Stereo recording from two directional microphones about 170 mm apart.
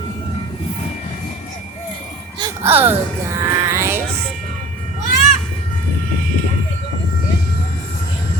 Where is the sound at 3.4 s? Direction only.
20° right (ahead or behind).